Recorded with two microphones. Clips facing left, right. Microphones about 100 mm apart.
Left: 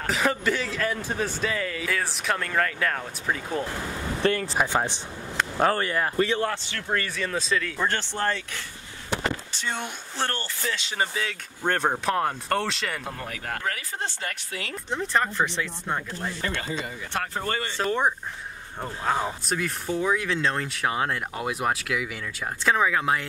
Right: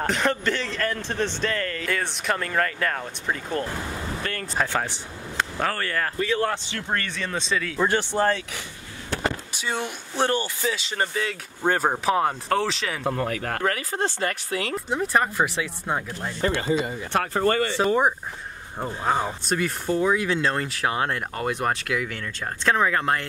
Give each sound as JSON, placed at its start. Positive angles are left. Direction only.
{"t": 0.0, "sound": "speech", "side_deg": 5}
{"t": 4.4, "sound": "speech", "side_deg": 15}
{"t": 6.4, "sound": "speech", "side_deg": -15}
{"t": 6.9, "sound": "speech", "side_deg": 0}
{"t": 9.2, "sound": "a sound", "side_deg": -10}
{"t": 10.1, "sound": "speech", "side_deg": -15}
{"t": 13.3, "sound": "speech", "side_deg": -65}
{"t": 14.9, "sound": "speech", "side_deg": -10}
{"t": 17.1, "sound": "speech", "side_deg": -75}
{"t": 17.8, "sound": "speech", "side_deg": -10}
{"t": 19.2, "sound": "speech", "side_deg": 0}